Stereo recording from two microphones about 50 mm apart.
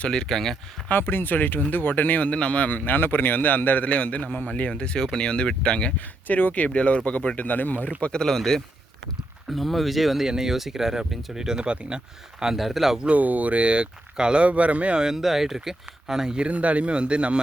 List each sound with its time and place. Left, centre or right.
0.0 s speech: centre
0.9 s speech: left
4.7 s speech: centre
6.2 s speech: left
8.0 s speech: centre
12.4 s speech: centre
13.0 s speech: right
15.0 s speech: centre
16.5 s speech: right